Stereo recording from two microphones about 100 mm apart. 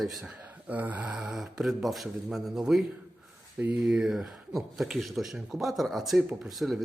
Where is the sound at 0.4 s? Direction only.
15° right (ahead or behind).